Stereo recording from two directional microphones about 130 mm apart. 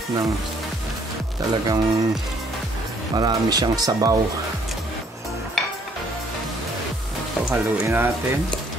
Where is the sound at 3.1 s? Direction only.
30° right (ahead or behind).